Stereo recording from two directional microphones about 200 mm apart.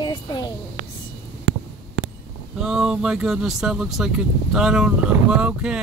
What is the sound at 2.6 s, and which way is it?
Speech, 5° right (ahead or behind).